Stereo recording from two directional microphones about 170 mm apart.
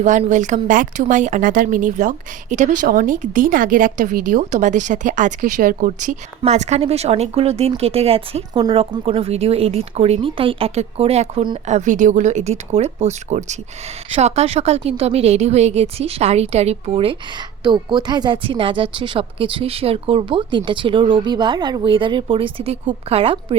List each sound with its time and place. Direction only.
0.0 s a woman's voice: 45° right (ahead or behind)
11.6 s a woman's voice: 45° right (ahead or behind)